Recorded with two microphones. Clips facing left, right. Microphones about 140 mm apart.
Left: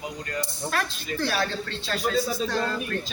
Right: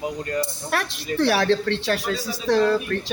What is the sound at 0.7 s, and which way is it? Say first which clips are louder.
Speech: right 6 dB; 70° right (ahead or behind).